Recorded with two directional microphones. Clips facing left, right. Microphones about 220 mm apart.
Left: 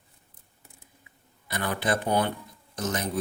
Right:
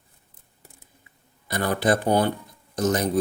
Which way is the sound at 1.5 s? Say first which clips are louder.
Right 6 dB; 40° right (ahead or behind).